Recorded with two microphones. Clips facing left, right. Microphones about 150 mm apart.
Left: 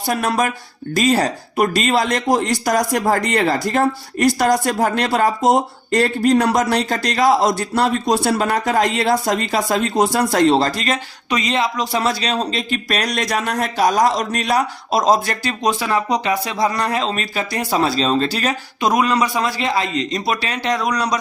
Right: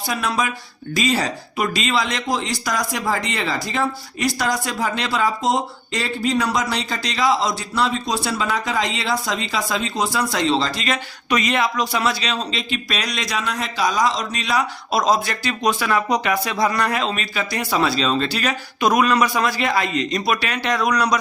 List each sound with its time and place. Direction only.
0.1 s speech: 45° left (ahead or behind)
11.3 s speech: 25° left (ahead or behind)
18.8 s a man's voice: 25° left (ahead or behind)